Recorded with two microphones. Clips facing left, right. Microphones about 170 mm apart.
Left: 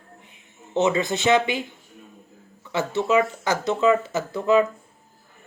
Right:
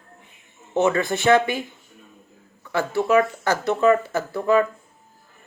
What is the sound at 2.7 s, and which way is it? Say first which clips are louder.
Speech: right 2 dB; 20° left (ahead or behind).